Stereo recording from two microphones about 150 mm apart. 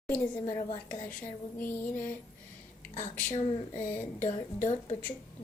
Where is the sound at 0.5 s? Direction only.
60° left (ahead or behind).